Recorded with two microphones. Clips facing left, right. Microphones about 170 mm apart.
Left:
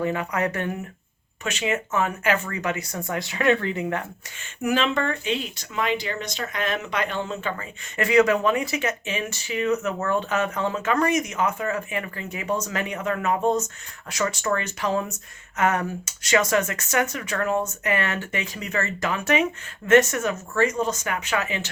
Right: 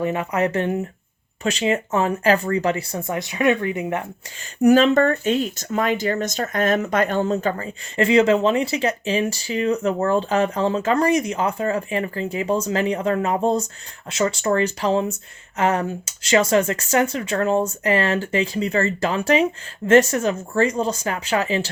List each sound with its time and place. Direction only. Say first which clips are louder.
0.0 s speech: right 3 dB; 25° right (ahead or behind)
4.6 s speech: right 9 dB; 40° right (ahead or behind)